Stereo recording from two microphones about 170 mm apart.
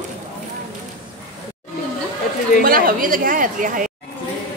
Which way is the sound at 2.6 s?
60° right (ahead or behind).